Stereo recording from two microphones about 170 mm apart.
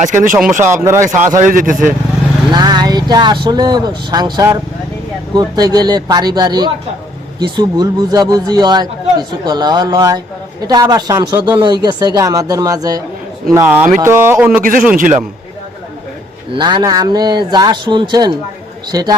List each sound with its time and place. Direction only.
0.6 s speech: 15° right (ahead or behind)
1.5 s speech: 50° right (ahead or behind)
2.5 s a man's voice: 25° right (ahead or behind); by 14.6 s 10° right (ahead or behind)
14.6 s a man's voice: 55° right (ahead or behind)
16.5 s a man's voice: 25° right (ahead or behind)